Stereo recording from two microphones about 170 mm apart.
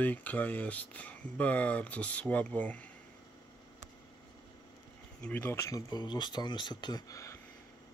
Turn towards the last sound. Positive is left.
turn(degrees=20)  # may be behind; listen again after turning